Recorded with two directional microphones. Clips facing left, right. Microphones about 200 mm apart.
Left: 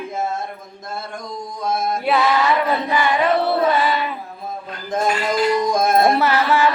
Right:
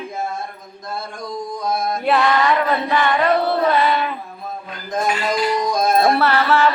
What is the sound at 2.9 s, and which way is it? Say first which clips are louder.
Carnatic music: right 1 dB; 10° left (ahead or behind).